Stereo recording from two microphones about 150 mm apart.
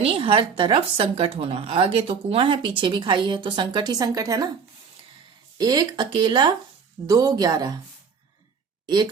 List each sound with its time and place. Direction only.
0.0 s a woman's voice: 35° right (ahead or behind)
5.5 s speech: 25° right (ahead or behind)